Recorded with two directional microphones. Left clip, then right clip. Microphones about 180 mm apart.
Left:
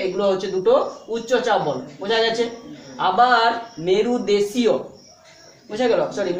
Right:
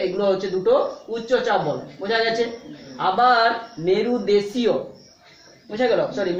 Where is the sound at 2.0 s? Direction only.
10° left (ahead or behind).